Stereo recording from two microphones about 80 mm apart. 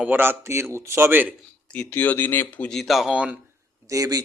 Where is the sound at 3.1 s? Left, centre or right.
Centre.